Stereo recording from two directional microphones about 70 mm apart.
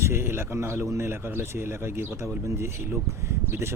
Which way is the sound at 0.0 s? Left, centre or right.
Right.